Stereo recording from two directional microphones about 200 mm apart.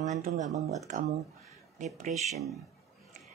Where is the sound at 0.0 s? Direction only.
35° right (ahead or behind).